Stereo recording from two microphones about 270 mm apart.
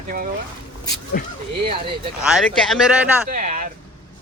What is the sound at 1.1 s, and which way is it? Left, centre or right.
Speech, left.